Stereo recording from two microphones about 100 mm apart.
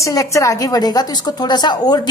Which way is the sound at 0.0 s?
30° left (ahead or behind).